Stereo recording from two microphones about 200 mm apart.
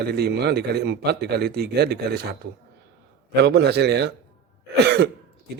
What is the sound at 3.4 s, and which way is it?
Speech, 55° right (ahead or behind).